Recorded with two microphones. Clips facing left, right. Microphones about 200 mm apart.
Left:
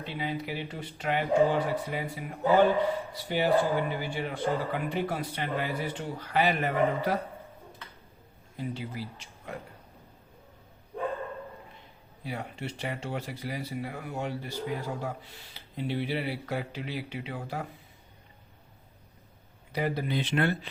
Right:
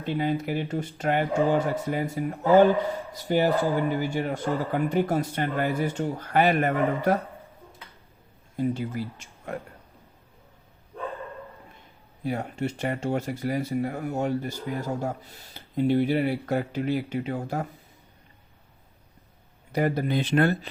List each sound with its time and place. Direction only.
0.0 s speech: 50° right (ahead or behind)
8.5 s speech: 50° right (ahead or behind)
12.2 s speech: 45° right (ahead or behind)
19.7 s speech: 50° right (ahead or behind)